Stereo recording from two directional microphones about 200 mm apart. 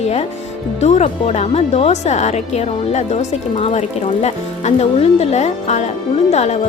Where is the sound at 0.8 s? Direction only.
35° left (ahead or behind).